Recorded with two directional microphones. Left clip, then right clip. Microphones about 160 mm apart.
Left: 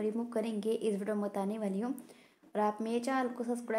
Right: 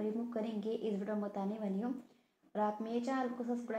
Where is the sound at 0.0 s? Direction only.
40° left (ahead or behind).